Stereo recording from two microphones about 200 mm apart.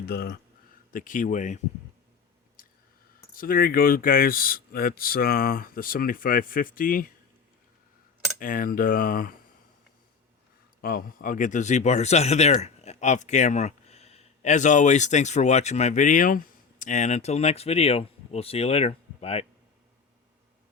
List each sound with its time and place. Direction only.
0.0 s speech: 50° left (ahead or behind)
0.9 s speech: 40° left (ahead or behind)
2.6 s a sound: 45° left (ahead or behind)
3.3 s speech: 45° left (ahead or behind)
8.4 s speech: 45° left (ahead or behind)
10.8 s speech: 45° left (ahead or behind); by 19.5 s 30° left (ahead or behind)